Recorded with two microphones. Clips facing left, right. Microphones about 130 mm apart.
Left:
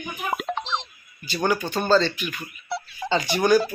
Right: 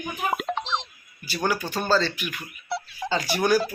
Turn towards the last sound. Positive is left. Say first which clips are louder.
# left 3 dB
turn(degrees=-5)  # may be behind; listen again after turning